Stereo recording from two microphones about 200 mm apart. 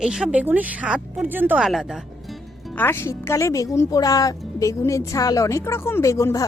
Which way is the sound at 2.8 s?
10° left (ahead or behind).